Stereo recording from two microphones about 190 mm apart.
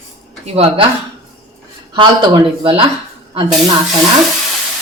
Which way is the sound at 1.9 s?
25° right (ahead or behind).